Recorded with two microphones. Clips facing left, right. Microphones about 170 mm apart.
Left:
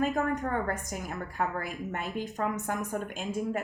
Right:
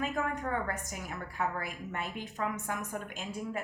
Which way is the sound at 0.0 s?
45° left (ahead or behind).